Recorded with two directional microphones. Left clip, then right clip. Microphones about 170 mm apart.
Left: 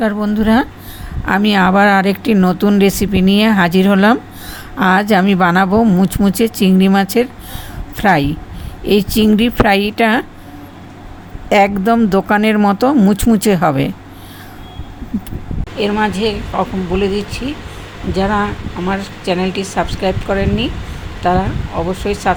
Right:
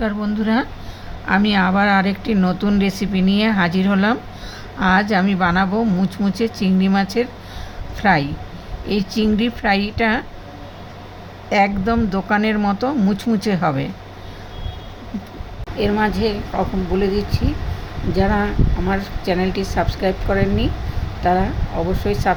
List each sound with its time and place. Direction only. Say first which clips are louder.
0.0 s speech: left 6 dB; 40° left (ahead or behind)
11.4 s speech: left 6 dB; 45° left (ahead or behind)
15.8 s a woman's voice: left 3 dB; 5° left (ahead or behind)